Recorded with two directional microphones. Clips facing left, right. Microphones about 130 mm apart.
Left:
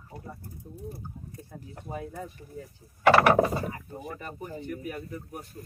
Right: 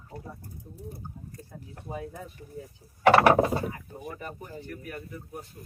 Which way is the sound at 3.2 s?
25° right (ahead or behind).